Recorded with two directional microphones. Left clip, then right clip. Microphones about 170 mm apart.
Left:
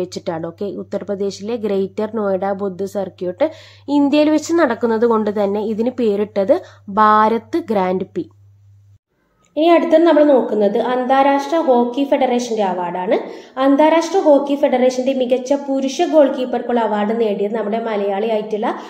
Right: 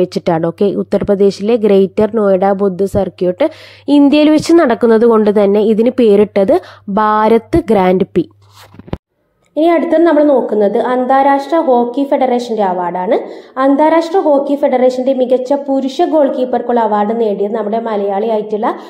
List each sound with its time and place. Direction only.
0.0 s a woman's voice: 40° right (ahead or behind)
9.6 s a woman's voice: 30° right (ahead or behind)